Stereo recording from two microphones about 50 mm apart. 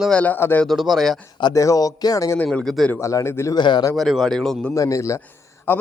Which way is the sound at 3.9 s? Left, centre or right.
Centre.